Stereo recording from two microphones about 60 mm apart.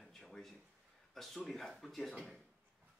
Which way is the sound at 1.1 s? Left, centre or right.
Centre.